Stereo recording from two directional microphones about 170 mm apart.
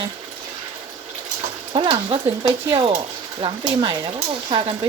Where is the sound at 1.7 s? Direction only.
30° right (ahead or behind).